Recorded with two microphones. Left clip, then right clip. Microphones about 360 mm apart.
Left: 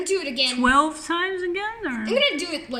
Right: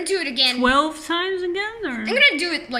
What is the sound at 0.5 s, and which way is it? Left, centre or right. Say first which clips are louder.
A woman's voice: right 1 dB; centre.